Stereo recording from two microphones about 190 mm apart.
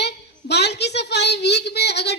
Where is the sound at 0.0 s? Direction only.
60° left (ahead or behind).